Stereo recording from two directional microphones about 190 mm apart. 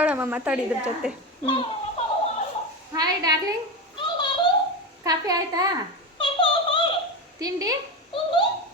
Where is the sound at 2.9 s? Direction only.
20° right (ahead or behind).